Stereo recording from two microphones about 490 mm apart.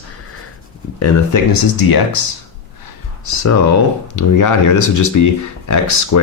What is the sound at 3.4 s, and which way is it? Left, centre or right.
Speech, left.